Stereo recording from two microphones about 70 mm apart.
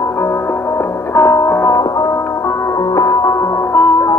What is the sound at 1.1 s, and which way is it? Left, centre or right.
Music, left.